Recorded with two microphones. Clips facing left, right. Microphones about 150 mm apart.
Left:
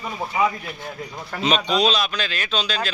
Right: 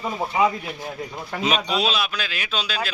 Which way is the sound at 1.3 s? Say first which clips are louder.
Left 2 dB; 10° right (ahead or behind).